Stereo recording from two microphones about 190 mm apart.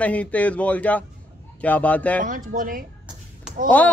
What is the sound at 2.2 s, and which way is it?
Speech, 45° right (ahead or behind).